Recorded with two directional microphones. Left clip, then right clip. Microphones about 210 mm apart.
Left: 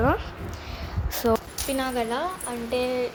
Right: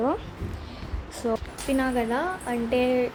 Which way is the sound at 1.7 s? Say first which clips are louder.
Right 1 dB; 10° right (ahead or behind).